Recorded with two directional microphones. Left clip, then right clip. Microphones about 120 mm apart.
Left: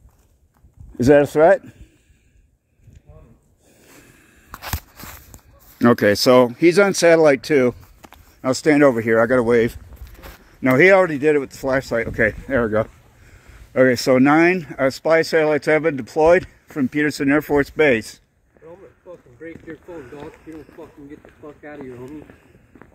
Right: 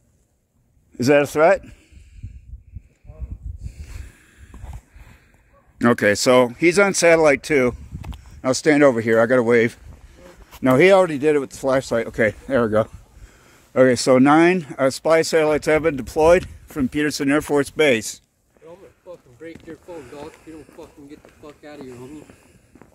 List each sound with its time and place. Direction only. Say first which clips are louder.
0.9 s speech: left 3 dB; 35° left (ahead or behind)
3.6 s snort: even; 35° left (ahead or behind)
5.8 s speech: left 2 dB; 35° left (ahead or behind)
6.6 s speech: left 1 dB; 20° left (ahead or behind)
8.4 s speech: even; 5° right (ahead or behind)
10.6 s speech: left 1 dB; 30° right (ahead or behind); by 18.1 s 5° right (ahead or behind)
19.0 s a sound: left 1 dB; 25° right (ahead or behind)
19.7 s speech: left 1 dB; 5° right (ahead or behind)
21.2 s a sound: left 2 dB; 10° right (ahead or behind)
21.5 s speech: left 3 dB; 20° right (ahead or behind)
21.8 s a sound: left 3 dB; 10° right (ahead or behind)